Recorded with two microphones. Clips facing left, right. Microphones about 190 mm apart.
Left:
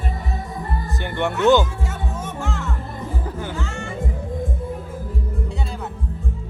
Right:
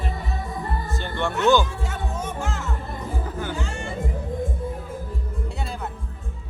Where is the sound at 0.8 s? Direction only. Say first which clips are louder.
Left 5 dB; 15° left (ahead or behind).